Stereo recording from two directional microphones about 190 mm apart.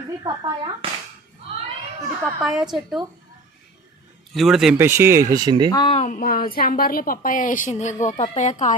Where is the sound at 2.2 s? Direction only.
5° right (ahead or behind).